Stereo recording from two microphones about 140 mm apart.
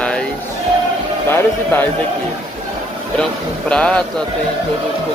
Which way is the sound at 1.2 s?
15° left (ahead or behind).